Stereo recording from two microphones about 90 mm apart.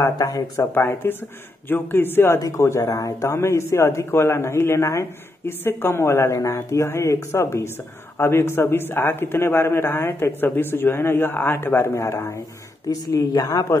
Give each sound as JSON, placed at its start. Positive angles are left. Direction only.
{"t": 0.0, "sound": "speech", "side_deg": 40}
{"t": 0.7, "sound": "a man's voice", "side_deg": 25}
{"t": 2.3, "sound": "a man's voice", "side_deg": 35}